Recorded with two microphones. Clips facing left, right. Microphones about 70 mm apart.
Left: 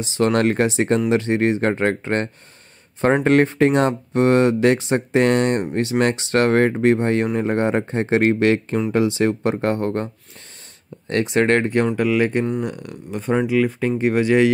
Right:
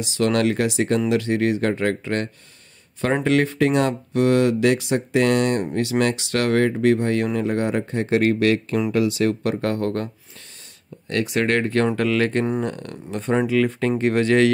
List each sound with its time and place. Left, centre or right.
0.0 s speech: left
3.3 s speech: left
11.1 s speech: left
11.7 s speech: centre